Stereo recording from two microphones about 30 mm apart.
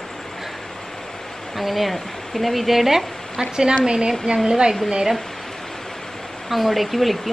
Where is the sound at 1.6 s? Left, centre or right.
Centre.